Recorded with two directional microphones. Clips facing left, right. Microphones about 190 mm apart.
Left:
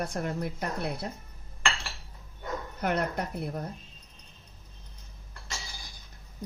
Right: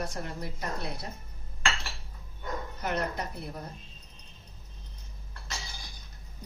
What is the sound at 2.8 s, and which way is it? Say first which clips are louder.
Speech: left 4 dB; 55° left (ahead or behind).